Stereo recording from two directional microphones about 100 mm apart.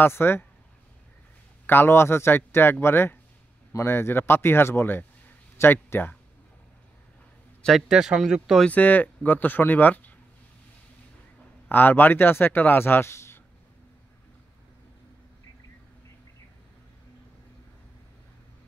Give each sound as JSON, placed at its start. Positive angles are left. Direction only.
{"t": 0.0, "sound": "speech", "side_deg": 20}
{"t": 1.7, "sound": "speech", "side_deg": 20}
{"t": 7.9, "sound": "speech", "side_deg": -5}
{"t": 8.6, "sound": "speech", "side_deg": 15}
{"t": 11.7, "sound": "speech", "side_deg": 20}